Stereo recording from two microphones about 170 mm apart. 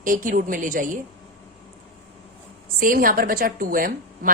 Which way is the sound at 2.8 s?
55° right (ahead or behind).